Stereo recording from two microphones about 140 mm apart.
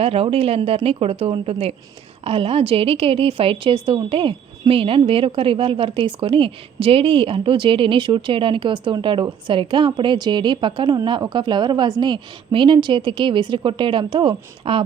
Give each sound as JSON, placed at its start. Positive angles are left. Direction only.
{"t": 0.0, "sound": "a woman's voice", "side_deg": -45}